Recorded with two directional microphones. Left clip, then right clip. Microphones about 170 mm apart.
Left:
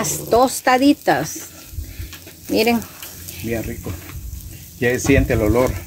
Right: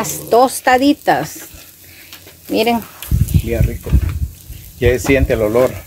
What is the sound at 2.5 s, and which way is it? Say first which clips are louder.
Speech: right 2 dB; 10° right (ahead or behind).